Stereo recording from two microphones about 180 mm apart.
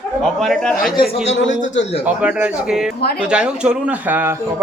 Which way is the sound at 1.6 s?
40° left (ahead or behind).